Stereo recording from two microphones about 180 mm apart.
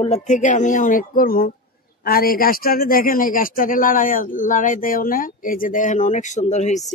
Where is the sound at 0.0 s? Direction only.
40° left (ahead or behind).